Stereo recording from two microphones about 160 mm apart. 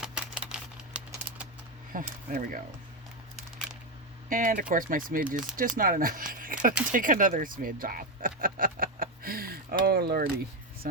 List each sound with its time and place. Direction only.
0.0 s typewriter: 5° right (ahead or behind)
1.9 s speech: 60° right (ahead or behind)
4.3 s speech: 60° right (ahead or behind)
6.4 s a sound: 60° right (ahead or behind)
6.9 s speech: 55° right (ahead or behind); by 10.2 s 75° right (ahead or behind)